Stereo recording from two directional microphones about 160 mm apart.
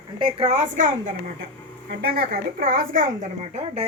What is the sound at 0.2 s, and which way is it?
Speech, 35° right (ahead or behind).